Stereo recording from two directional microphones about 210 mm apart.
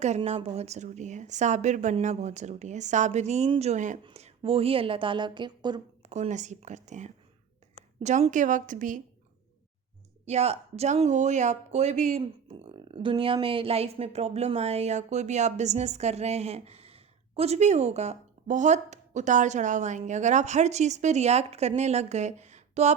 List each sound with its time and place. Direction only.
0.0 s speech: 30° right (ahead or behind)
6.1 s speech: 35° right (ahead or behind)
10.2 s speech: 30° right (ahead or behind)